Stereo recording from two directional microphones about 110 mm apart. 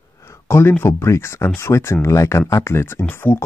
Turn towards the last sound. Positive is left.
turn(degrees=20)  # may be behind; listen again after turning